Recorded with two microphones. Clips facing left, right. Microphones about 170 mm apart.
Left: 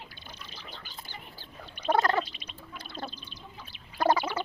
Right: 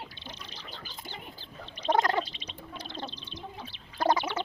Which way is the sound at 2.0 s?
15° right (ahead or behind).